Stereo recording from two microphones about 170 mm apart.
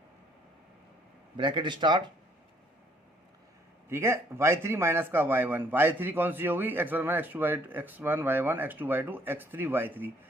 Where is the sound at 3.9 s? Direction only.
15° right (ahead or behind).